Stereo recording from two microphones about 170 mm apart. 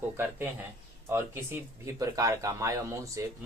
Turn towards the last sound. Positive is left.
turn(degrees=-20)  # may be behind; listen again after turning